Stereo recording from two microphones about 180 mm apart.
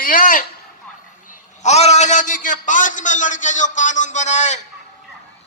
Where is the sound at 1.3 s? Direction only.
40° left (ahead or behind).